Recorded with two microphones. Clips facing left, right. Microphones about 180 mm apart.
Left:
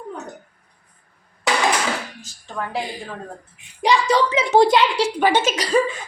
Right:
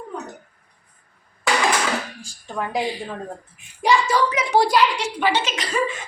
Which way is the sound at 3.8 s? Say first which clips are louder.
Left 1 dB; 15° left (ahead or behind).